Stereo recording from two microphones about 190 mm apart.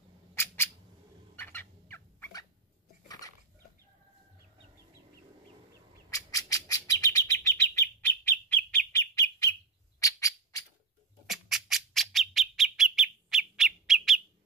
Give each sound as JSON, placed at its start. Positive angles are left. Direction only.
{"t": 0.3, "sound": "squawk", "side_deg": 10}
{"t": 1.3, "sound": "fowl", "side_deg": 10}
{"t": 6.0, "sound": "bird", "side_deg": 15}
{"t": 9.9, "sound": "squawk", "side_deg": 15}
{"t": 11.2, "sound": "bird", "side_deg": 0}